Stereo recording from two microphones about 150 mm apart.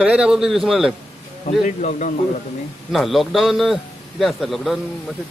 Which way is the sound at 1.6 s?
55° left (ahead or behind).